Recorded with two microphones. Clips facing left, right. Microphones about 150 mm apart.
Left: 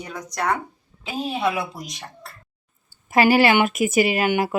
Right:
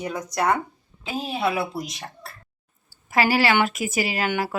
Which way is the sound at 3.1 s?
20° left (ahead or behind).